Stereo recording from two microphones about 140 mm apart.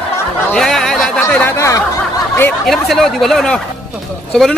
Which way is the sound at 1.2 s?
15° left (ahead or behind).